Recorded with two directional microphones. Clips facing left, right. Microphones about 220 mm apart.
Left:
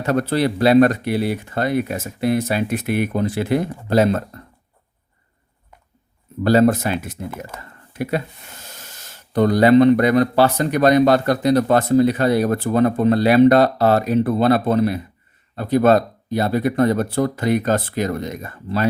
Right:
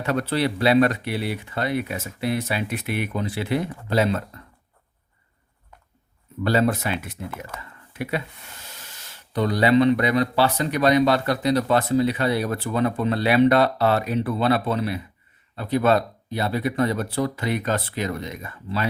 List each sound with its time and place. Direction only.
0.0 s speech: 45° left (ahead or behind)
6.4 s speech: 45° left (ahead or behind)